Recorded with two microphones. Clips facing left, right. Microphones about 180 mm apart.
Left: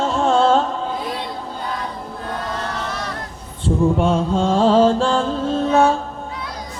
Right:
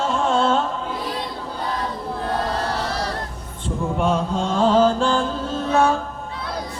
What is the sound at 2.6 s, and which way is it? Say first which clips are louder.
Vehicle: right 2 dB; 35° right (ahead or behind).